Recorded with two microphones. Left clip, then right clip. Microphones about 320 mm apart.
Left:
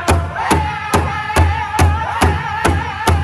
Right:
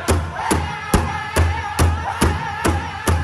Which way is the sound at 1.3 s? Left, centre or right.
Centre.